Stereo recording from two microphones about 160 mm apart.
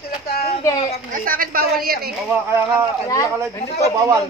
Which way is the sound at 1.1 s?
60° right (ahead or behind).